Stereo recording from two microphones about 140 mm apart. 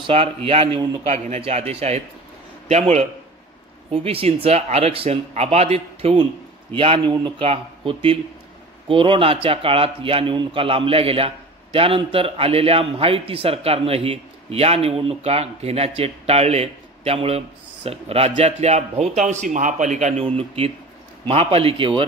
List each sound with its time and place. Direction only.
0.0 s speech: 40° right (ahead or behind)
3.9 s speech: 45° right (ahead or behind); by 20.2 s 60° right (ahead or behind)
20.2 s speech: 45° right (ahead or behind)